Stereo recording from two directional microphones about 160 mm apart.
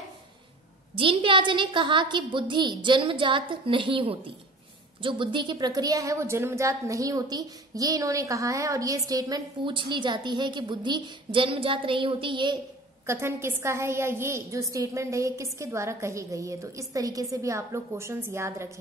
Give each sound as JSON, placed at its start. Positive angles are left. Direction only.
{"t": 0.9, "sound": "a woman's voice", "side_deg": -35}
{"t": 13.0, "sound": "a woman's voice", "side_deg": -15}